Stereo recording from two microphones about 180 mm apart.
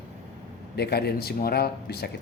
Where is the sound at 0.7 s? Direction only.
65° left (ahead or behind).